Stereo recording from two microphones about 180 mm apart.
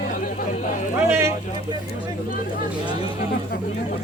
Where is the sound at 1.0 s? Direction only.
15° right (ahead or behind).